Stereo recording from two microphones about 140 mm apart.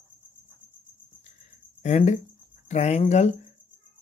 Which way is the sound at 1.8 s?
55° left (ahead or behind).